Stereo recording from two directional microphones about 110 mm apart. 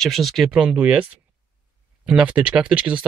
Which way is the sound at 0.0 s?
Centre (ahead or behind).